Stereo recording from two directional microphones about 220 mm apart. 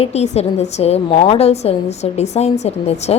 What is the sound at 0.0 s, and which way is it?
A woman's voice, 30° left (ahead or behind).